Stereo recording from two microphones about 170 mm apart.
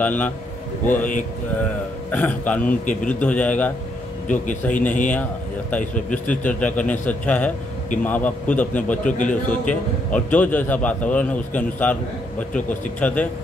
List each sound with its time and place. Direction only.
0.0 s a man's voice: 10° left (ahead or behind)
1.6 s a man's voice: 10° left (ahead or behind)
2.8 s speech: 50° left (ahead or behind)
3.1 s a man's voice: 10° left (ahead or behind)
4.3 s speech: 50° left (ahead or behind)
5.1 s a man's voice: 10° left (ahead or behind)
9.0 s speech: 50° left (ahead or behind)
9.5 s a man's voice: 10° left (ahead or behind)